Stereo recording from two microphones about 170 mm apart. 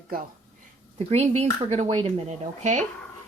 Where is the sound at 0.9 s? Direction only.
35° right (ahead or behind).